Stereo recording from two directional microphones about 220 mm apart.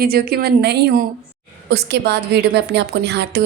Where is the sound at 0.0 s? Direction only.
45° right (ahead or behind).